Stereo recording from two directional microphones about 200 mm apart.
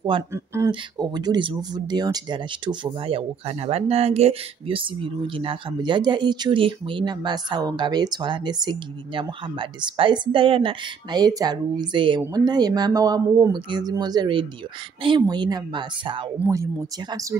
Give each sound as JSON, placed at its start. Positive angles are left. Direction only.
{"t": 0.3, "sound": "speech", "side_deg": -15}